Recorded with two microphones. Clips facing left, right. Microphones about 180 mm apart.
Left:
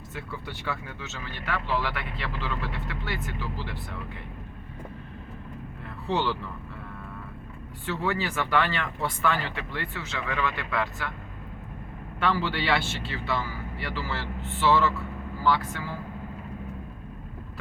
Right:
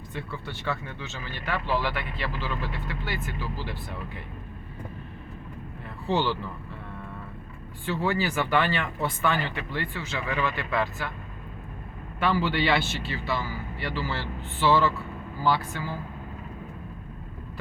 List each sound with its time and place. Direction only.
0.1 s speech: 10° left (ahead or behind)
6.1 s speech: centre (ahead or behind)
8.0 s speech: centre (ahead or behind)
12.2 s speech: 5° right (ahead or behind)